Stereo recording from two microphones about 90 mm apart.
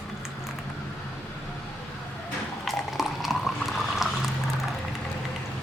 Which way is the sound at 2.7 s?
Centre (ahead or behind).